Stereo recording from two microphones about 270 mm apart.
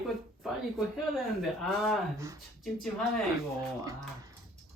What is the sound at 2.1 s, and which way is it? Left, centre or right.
Speech, centre.